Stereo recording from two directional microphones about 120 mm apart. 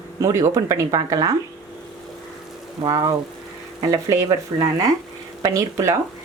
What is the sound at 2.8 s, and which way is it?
Speech, 35° right (ahead or behind).